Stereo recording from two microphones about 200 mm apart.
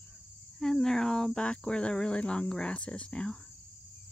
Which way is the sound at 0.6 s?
Centre (ahead or behind).